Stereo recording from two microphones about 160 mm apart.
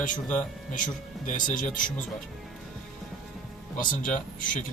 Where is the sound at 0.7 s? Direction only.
55° left (ahead or behind).